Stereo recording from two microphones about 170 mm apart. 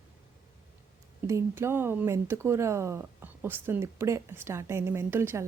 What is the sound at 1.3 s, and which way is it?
Speech, 15° right (ahead or behind).